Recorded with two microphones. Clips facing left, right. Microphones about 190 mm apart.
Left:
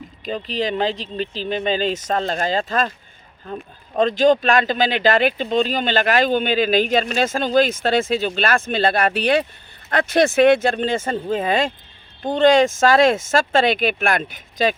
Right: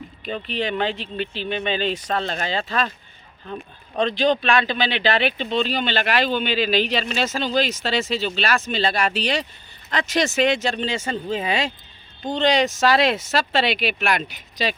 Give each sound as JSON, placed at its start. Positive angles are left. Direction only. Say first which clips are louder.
{"t": 0.3, "sound": "speech", "louder": "left 3 dB", "side_deg": 35}